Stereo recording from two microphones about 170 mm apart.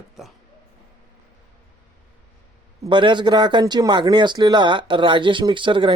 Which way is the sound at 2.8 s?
25° right (ahead or behind).